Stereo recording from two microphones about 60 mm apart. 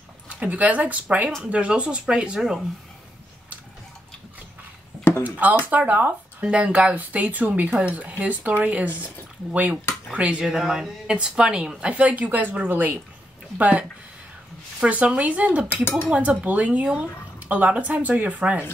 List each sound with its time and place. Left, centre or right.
0.3 s speech: right
5.2 s speech: right
10.4 s speech: centre; by 18.7 s right